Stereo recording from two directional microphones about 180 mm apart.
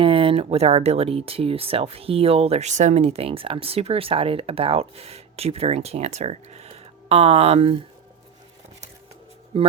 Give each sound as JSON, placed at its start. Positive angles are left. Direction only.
{"t": 0.0, "sound": "speech", "side_deg": -30}
{"t": 9.5, "sound": "speech", "side_deg": -30}